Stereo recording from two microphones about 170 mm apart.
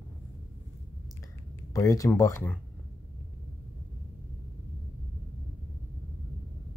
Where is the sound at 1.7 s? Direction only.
20° left (ahead or behind).